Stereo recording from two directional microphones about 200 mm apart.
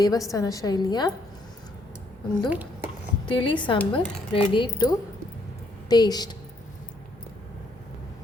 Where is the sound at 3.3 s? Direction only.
25° left (ahead or behind).